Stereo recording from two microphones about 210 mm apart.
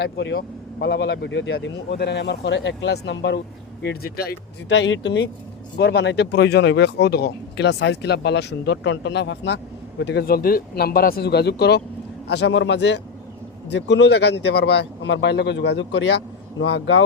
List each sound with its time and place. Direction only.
0.0 s speech: 55° left (ahead or behind)